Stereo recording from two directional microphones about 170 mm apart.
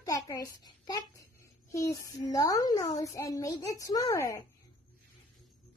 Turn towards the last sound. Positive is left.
turn(degrees=15)  # may be behind; listen again after turning